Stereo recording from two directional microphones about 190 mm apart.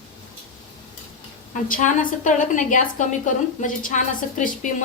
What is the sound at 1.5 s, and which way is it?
A woman's voice, 45° left (ahead or behind).